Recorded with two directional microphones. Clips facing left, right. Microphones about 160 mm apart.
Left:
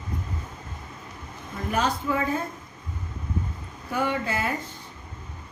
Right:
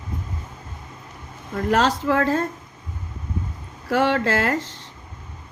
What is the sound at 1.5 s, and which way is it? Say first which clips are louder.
Speech: right 6 dB; 80° right.